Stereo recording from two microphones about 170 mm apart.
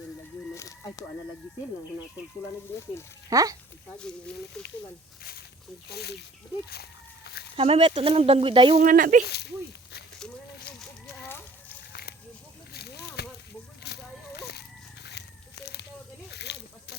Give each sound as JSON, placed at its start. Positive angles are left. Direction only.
{"t": 0.5, "sound": "a sound", "side_deg": 20}
{"t": 3.2, "sound": "speech", "side_deg": -20}
{"t": 3.9, "sound": "speech", "side_deg": 5}
{"t": 5.9, "sound": "speech", "side_deg": 70}
{"t": 7.5, "sound": "speech", "side_deg": -35}
{"t": 8.8, "sound": "speech", "side_deg": -55}
{"t": 12.7, "sound": "a sound", "side_deg": 70}
{"t": 15.6, "sound": "snake", "side_deg": 75}